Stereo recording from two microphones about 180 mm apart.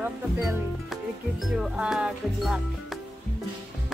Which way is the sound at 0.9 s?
Centre (ahead or behind).